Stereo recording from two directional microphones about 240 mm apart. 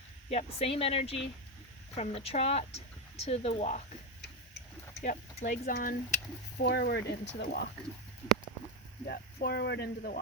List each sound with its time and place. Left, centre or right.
0.3 s speech: left
5.0 s speech: left
9.0 s speech: left